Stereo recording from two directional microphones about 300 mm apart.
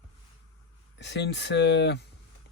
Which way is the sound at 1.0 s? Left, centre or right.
Left.